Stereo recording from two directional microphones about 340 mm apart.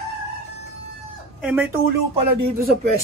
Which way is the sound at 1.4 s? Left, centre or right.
Centre.